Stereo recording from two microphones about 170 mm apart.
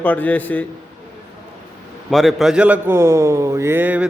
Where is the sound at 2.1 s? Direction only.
Centre (ahead or behind).